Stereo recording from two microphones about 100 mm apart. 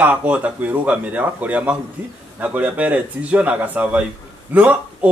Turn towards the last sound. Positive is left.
turn(degrees=-15)  # may be behind; listen again after turning